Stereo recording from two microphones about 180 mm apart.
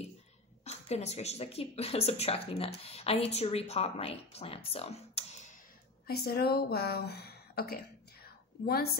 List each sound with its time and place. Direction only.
0.7 s speech: 35° left (ahead or behind)
6.0 s a woman's voice: 60° left (ahead or behind)